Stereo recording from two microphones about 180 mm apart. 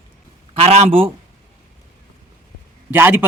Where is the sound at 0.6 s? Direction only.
35° right (ahead or behind).